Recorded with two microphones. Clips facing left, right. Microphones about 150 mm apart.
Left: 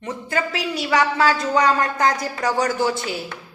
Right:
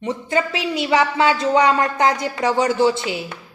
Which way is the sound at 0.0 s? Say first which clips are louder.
Right 4 dB; 25° right (ahead or behind).